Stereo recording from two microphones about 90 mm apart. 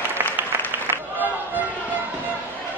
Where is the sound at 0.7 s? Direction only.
20° right (ahead or behind).